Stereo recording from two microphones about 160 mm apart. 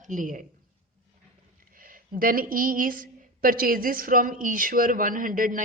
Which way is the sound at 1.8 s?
60° right (ahead or behind).